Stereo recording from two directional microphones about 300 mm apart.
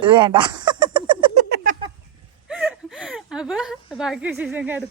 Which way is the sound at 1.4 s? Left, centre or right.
Right.